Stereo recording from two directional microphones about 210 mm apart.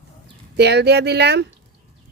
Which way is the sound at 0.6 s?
55° right (ahead or behind).